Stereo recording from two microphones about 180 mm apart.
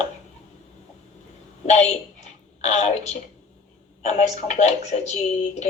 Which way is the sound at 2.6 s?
40° left (ahead or behind).